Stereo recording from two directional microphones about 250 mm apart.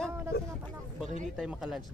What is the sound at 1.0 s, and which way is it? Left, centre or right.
Speech, right.